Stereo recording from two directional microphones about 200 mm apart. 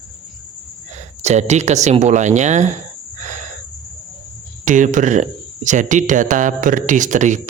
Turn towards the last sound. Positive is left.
turn(degrees=-35)  # may be behind; listen again after turning